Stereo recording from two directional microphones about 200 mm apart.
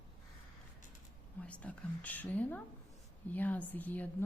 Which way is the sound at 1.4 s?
5° left (ahead or behind).